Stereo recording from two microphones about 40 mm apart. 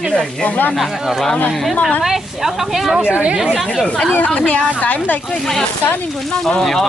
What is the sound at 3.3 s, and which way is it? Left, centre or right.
Speech, centre.